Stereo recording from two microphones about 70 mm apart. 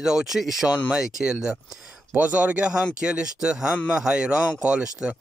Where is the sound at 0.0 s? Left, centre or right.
Centre.